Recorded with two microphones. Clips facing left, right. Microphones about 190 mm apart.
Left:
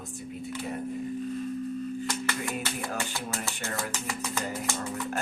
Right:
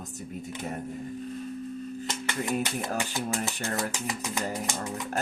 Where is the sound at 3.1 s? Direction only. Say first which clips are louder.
Right 4 dB; 15° right (ahead or behind).